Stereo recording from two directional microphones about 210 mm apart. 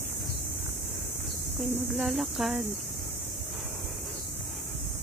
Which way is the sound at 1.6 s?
5° right (ahead or behind).